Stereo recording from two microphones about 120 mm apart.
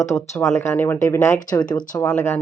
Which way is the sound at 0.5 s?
20° left (ahead or behind).